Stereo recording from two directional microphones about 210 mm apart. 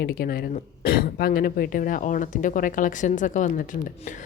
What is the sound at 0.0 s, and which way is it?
Speech, 45° left (ahead or behind).